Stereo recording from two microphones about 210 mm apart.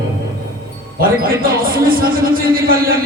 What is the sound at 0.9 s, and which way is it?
A man's voice, 45° right (ahead or behind).